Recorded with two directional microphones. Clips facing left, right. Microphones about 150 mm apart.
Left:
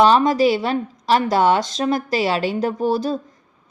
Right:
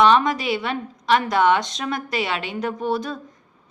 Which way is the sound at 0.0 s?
35° left (ahead or behind).